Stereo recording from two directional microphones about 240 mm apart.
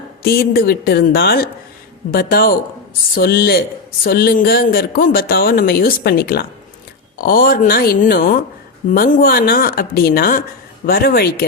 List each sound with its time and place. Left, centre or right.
0.2 s speech: left